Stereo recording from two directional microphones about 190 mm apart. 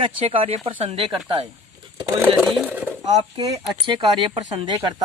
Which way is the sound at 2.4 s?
Centre (ahead or behind).